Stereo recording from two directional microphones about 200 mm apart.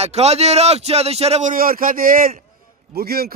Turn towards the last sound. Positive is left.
turn(degrees=-50)  # may be behind; listen again after turning